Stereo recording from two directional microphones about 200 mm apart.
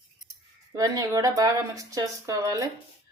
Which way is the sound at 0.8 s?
15° right (ahead or behind).